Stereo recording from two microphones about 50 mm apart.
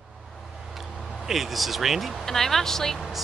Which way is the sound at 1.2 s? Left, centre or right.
Centre.